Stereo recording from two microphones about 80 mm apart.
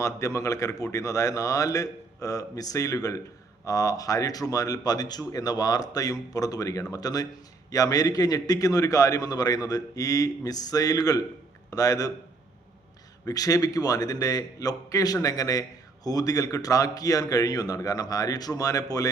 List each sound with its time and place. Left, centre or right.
0.0 s a man's voice: left
13.2 s a man's voice: left